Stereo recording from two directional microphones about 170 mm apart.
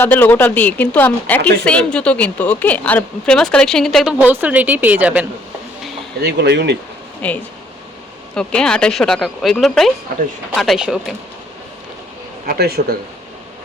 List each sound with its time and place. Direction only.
0.0 s a woman's voice: 10° left (ahead or behind); by 5.2 s 10° right (ahead or behind)
6.2 s speech: 80° right
7.2 s a woman's voice: 10° left (ahead or behind)
12.5 s speech: 65° right (ahead or behind)